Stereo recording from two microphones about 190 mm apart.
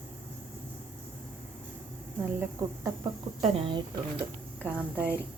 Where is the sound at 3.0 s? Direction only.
25° right (ahead or behind).